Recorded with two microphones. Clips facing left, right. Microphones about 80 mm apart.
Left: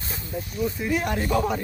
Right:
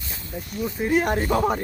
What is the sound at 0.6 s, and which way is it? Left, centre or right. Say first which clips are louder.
Speech: right 5 dB; right.